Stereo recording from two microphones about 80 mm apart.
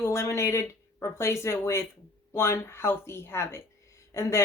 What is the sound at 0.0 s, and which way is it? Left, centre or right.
Speech, left.